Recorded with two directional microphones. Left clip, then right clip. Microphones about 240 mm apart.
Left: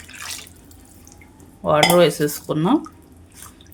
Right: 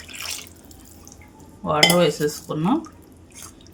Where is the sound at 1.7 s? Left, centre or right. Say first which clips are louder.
Left 3 dB; left.